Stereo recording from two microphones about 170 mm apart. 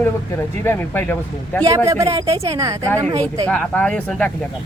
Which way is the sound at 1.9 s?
20° right (ahead or behind).